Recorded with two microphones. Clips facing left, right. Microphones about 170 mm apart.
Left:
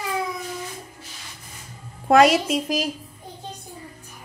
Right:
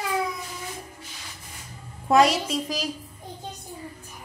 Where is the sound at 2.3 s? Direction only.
50° left (ahead or behind).